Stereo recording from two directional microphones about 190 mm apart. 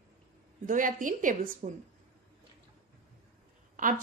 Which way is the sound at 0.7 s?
45° right (ahead or behind).